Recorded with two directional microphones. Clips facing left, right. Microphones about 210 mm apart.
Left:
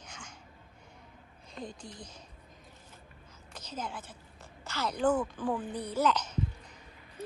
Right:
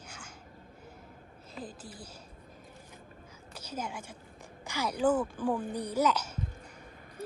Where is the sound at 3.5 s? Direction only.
10° right (ahead or behind).